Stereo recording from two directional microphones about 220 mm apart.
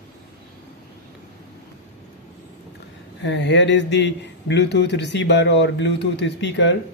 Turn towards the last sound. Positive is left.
turn(degrees=55)  # may be behind; listen again after turning